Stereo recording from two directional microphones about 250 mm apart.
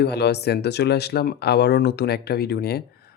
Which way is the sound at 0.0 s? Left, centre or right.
Left.